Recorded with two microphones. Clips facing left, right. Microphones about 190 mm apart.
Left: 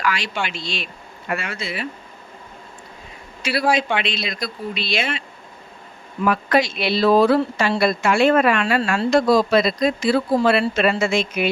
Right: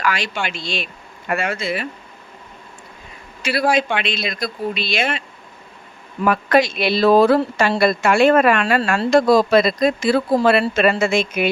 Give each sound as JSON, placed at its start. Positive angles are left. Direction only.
{"t": 0.0, "sound": "speech", "side_deg": -50}
{"t": 3.4, "sound": "speech", "side_deg": -50}
{"t": 6.2, "sound": "speech", "side_deg": -55}